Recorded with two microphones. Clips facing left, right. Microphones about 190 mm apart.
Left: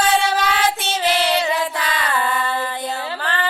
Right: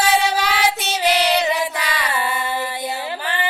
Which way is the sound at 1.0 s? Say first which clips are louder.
Right 1 dB; 20° right (ahead or behind).